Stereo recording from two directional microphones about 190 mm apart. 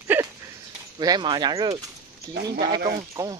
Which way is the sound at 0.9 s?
20° right (ahead or behind).